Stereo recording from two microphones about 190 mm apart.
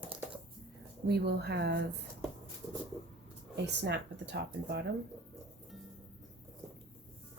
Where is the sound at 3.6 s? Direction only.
65° right (ahead or behind).